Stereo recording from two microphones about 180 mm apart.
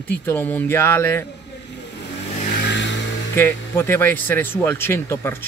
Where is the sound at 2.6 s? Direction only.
80° left.